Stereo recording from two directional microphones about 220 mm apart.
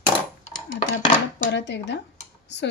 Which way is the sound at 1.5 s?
50° left (ahead or behind).